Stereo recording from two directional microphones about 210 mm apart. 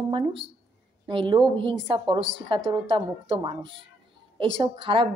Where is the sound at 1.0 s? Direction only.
25° right (ahead or behind).